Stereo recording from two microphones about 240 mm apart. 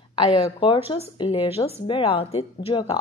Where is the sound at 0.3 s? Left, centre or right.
Left.